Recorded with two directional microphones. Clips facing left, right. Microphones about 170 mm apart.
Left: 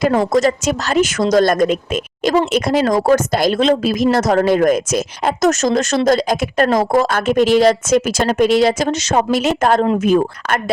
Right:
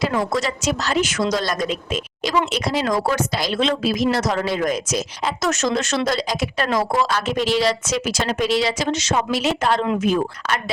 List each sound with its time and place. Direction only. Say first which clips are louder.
0.3 s speech: left 7 dB; 45° left (ahead or behind)